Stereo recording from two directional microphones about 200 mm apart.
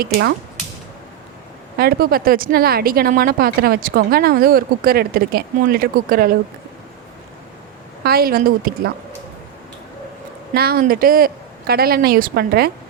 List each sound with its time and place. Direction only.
0.0 s speech: 50° right (ahead or behind)
1.8 s speech: 50° right (ahead or behind)
8.0 s speech: 50° right (ahead or behind)
10.5 s speech: 50° right (ahead or behind)